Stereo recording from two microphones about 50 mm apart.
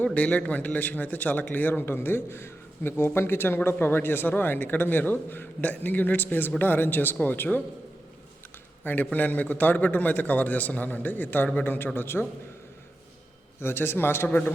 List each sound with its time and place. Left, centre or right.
0.0 s a man's voice: left
1.8 s a man's voice: left
8.8 s a man's voice: left
13.6 s a man's voice: left
14.3 s a man's voice: left